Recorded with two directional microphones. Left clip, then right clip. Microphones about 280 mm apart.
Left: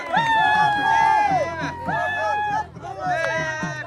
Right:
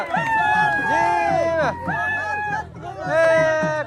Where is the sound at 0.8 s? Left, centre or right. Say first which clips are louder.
Left 1 dB; centre.